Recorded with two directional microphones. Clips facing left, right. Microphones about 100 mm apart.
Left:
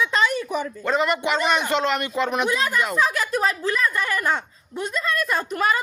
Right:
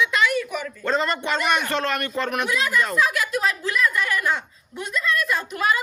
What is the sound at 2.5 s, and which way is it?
Speech, 35° left (ahead or behind).